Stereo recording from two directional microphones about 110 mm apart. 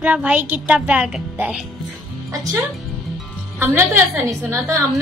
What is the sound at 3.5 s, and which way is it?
Speech, 20° right (ahead or behind).